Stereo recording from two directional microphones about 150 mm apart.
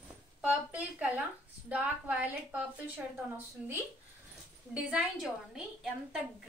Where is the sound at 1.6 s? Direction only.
10° right (ahead or behind).